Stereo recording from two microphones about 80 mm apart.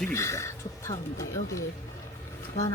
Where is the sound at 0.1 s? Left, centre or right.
Left.